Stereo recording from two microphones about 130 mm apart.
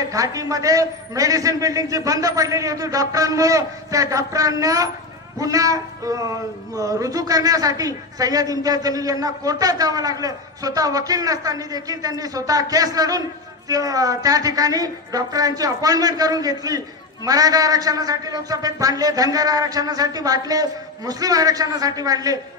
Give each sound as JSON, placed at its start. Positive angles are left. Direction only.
{"t": 0.1, "sound": "a woman's voice", "side_deg": -25}